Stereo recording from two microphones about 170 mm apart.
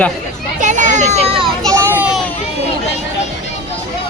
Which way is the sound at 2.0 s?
5° right (ahead or behind).